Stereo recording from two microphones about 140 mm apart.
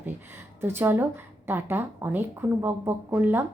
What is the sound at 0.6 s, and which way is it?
A woman's voice, 15° right (ahead or behind).